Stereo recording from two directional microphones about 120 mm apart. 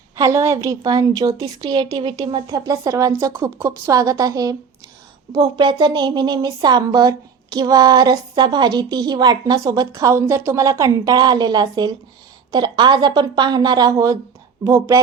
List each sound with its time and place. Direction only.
0.2 s a woman's voice: 25° right (ahead or behind)